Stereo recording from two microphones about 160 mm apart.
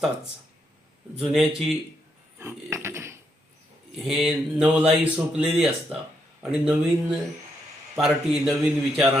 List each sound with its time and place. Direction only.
1.2 s speech: centre (ahead or behind)
2.4 s a sound: 15° right (ahead or behind)
3.9 s speech: centre (ahead or behind)